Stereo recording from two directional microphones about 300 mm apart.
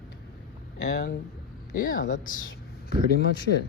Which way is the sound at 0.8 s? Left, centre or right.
Left.